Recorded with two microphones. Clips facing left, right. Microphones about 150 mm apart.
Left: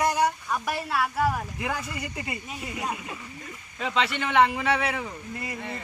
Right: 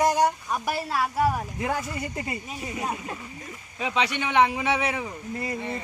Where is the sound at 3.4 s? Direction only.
10° right (ahead or behind).